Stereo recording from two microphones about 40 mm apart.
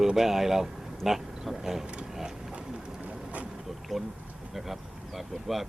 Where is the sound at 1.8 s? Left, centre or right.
Right.